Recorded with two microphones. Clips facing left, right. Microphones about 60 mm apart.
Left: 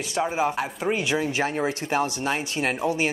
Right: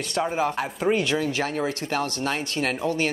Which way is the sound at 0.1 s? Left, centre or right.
Centre.